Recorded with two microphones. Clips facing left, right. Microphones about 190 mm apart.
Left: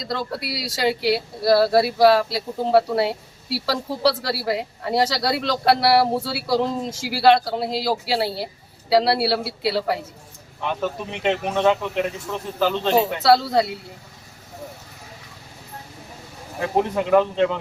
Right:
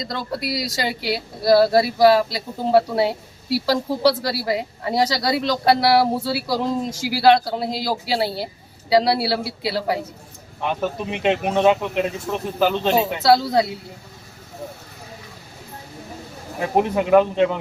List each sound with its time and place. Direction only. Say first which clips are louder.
0.0 s speech: right 1 dB; centre (ahead or behind)
10.8 s speech: right 2 dB; 15° right (ahead or behind)
13.2 s speech: right 2 dB; centre (ahead or behind)
16.7 s speech: right 2 dB; 15° right (ahead or behind)